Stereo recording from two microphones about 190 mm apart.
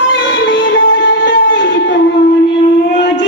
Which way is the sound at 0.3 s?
75° left (ahead or behind).